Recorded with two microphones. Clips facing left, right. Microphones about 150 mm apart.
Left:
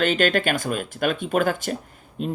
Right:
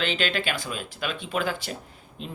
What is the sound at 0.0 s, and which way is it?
Speech, 50° left (ahead or behind).